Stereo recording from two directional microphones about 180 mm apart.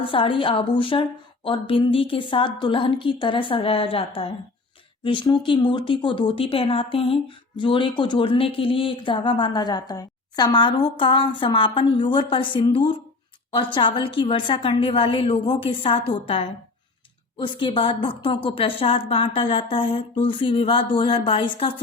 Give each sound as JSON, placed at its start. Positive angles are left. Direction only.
{"t": 0.0, "sound": "speech", "side_deg": 30}